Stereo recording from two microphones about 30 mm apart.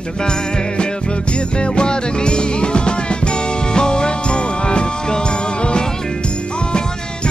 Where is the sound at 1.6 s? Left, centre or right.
Left.